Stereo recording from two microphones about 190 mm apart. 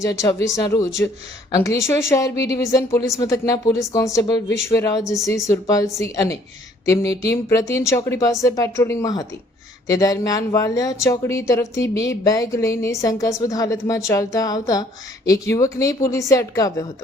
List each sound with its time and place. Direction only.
0.0 s speech: 15° left (ahead or behind)